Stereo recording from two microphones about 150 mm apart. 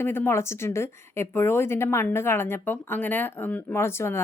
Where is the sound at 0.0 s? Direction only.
15° left (ahead or behind).